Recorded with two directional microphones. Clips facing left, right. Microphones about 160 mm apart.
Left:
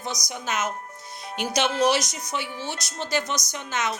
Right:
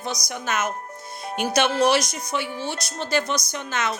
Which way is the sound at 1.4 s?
55° right (ahead or behind).